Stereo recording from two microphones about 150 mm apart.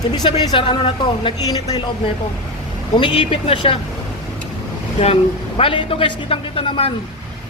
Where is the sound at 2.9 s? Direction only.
35° left (ahead or behind).